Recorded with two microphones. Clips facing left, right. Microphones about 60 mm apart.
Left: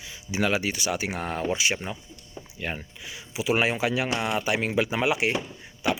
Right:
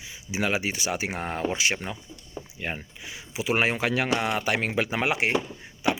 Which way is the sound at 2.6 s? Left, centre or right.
Right.